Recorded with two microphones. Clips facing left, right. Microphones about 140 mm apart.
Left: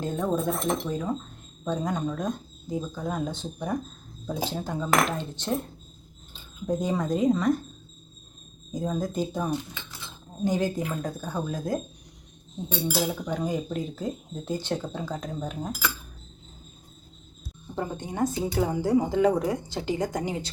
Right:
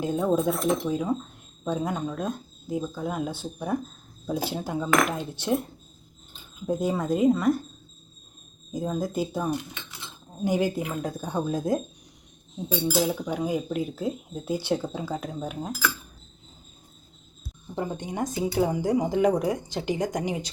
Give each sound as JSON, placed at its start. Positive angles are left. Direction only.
{"t": 0.0, "sound": "speech", "side_deg": -10}
{"t": 6.7, "sound": "speech", "side_deg": -5}
{"t": 8.7, "sound": "speech", "side_deg": -5}
{"t": 11.3, "sound": "speech", "side_deg": -25}
{"t": 12.9, "sound": "speech", "side_deg": 5}
{"t": 13.2, "sound": "speech", "side_deg": -10}
{"t": 17.7, "sound": "speech", "side_deg": -15}